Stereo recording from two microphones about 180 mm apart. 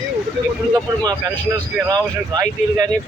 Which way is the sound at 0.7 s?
20° right (ahead or behind).